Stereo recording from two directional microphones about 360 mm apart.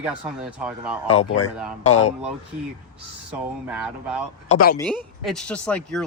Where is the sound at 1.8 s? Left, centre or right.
Centre.